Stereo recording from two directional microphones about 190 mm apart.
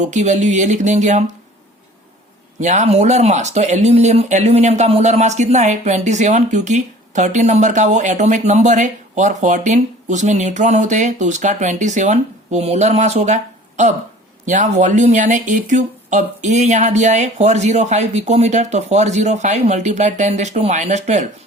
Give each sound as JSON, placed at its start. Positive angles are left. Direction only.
{"t": 0.0, "sound": "speech", "side_deg": -40}
{"t": 2.6, "sound": "speech", "side_deg": -40}